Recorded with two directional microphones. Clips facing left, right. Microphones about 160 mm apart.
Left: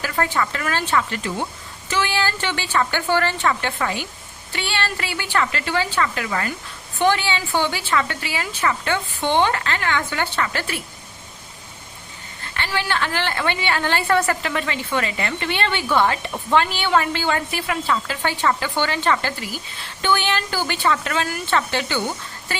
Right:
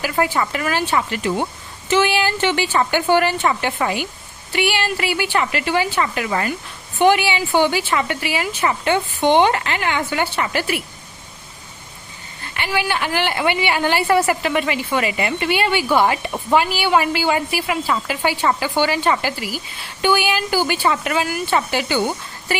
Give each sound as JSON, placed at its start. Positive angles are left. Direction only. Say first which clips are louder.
{"t": 0.0, "sound": "a woman's voice", "louder": "right 3 dB", "side_deg": -15}
{"t": 12.5, "sound": "a woman's voice", "louder": "right 2 dB", "side_deg": -15}